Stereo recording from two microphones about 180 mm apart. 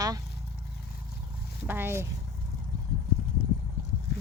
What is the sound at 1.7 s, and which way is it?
Speech, 10° right (ahead or behind).